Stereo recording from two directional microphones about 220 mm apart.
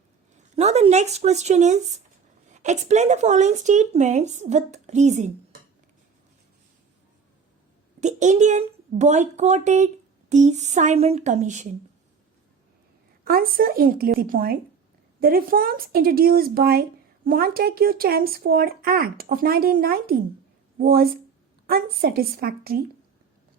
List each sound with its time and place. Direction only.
0.5 s speech: 30° right (ahead or behind)
8.0 s speech: 35° right (ahead or behind)
13.2 s speech: 40° right (ahead or behind)